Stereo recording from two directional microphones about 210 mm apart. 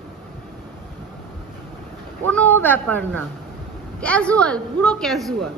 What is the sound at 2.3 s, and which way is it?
A woman's voice, 10° left (ahead or behind).